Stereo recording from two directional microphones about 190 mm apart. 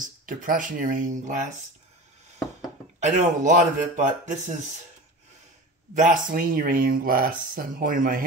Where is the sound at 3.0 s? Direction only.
40° right (ahead or behind).